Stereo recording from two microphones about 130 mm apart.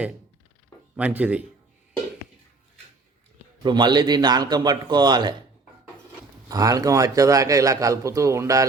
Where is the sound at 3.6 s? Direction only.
35° right (ahead or behind).